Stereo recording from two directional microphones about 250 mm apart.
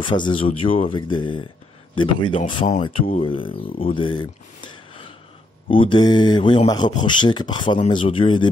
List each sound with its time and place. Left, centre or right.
0.0 s speech: centre
2.6 s speech: left